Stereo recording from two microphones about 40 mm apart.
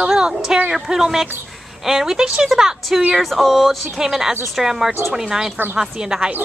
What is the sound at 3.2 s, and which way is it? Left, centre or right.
A woman's voice, centre.